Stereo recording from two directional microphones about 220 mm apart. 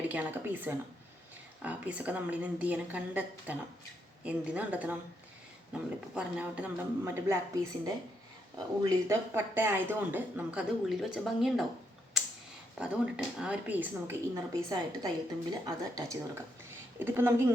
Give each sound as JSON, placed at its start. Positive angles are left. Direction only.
{"t": 0.1, "sound": "speech", "side_deg": -10}
{"t": 12.8, "sound": "speech", "side_deg": -5}